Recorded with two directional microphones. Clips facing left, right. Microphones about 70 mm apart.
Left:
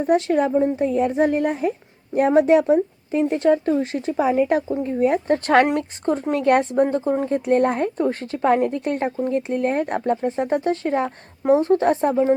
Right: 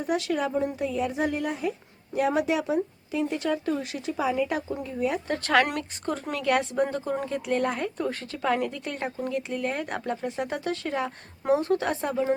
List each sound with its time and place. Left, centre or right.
0.0 s speech: left